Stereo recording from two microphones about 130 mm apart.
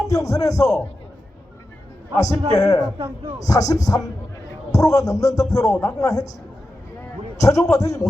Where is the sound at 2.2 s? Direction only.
25° left (ahead or behind).